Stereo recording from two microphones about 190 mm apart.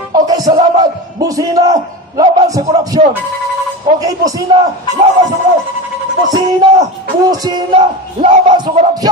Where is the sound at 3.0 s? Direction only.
40° right (ahead or behind).